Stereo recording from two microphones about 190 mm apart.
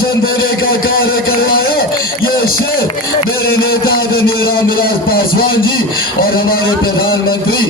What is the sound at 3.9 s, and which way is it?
Music, 50° left (ahead or behind).